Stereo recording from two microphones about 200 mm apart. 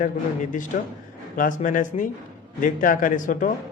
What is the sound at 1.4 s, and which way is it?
Speech, 40° left (ahead or behind).